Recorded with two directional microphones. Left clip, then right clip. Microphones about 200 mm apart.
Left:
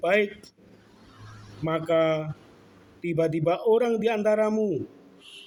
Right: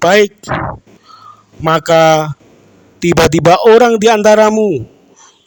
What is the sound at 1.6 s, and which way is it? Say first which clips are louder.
A man's voice: right 15 dB; 55° right (ahead or behind).